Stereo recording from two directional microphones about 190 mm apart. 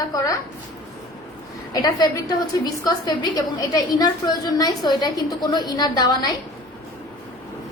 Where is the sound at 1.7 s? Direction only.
20° left (ahead or behind).